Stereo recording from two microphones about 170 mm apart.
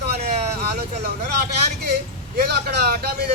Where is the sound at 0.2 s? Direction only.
40° right (ahead or behind).